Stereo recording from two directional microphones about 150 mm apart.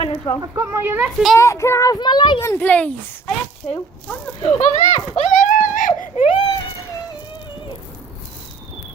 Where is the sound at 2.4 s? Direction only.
15° left (ahead or behind).